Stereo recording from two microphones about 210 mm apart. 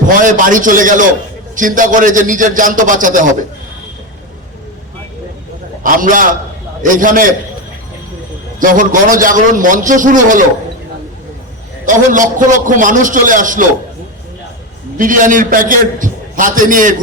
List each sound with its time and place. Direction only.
0.2 s a man's voice: 40° right (ahead or behind)
5.8 s a man's voice: 40° right (ahead or behind)
8.5 s a man's voice: 40° right (ahead or behind)
11.9 s a man's voice: 40° right (ahead or behind)
14.9 s a man's voice: 40° right (ahead or behind)